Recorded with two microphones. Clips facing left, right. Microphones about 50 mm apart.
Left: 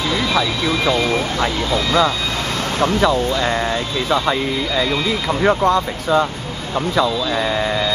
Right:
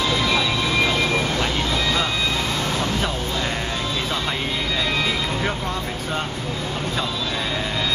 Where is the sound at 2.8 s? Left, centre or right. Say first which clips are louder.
Left 8 dB; left.